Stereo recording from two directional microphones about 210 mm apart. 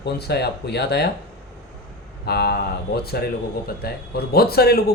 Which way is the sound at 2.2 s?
50° left (ahead or behind).